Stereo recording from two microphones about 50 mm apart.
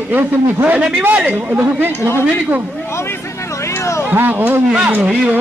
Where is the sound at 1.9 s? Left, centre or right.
Left.